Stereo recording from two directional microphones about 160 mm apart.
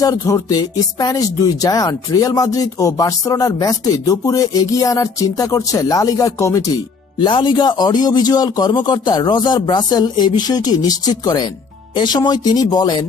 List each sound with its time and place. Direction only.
0.0 s speech: 20° left (ahead or behind)